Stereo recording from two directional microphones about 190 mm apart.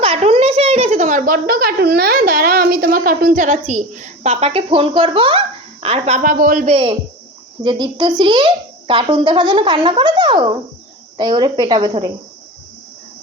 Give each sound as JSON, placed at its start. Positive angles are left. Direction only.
{"t": 0.0, "sound": "a child's voice", "side_deg": -30}
{"t": 6.7, "sound": "a child's voice", "side_deg": -30}